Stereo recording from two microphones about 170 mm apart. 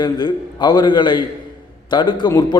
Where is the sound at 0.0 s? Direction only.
25° left (ahead or behind).